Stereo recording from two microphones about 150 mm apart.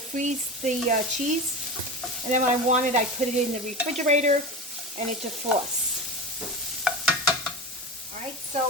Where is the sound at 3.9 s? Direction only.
50° right (ahead or behind).